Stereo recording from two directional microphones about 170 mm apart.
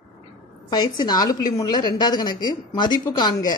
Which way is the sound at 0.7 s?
25° left (ahead or behind).